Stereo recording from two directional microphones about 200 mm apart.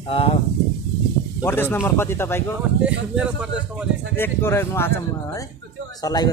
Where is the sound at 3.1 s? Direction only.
5° right (ahead or behind).